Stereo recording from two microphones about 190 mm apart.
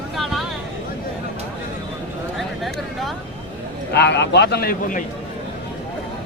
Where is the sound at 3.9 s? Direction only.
65° left (ahead or behind); by 5.0 s 45° left (ahead or behind).